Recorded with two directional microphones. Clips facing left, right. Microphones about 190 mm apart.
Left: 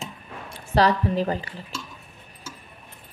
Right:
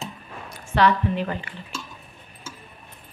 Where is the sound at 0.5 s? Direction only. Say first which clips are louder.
Even; 35° left (ahead or behind).